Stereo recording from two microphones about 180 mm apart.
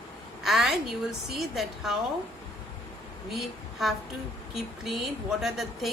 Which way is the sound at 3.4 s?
Centre (ahead or behind).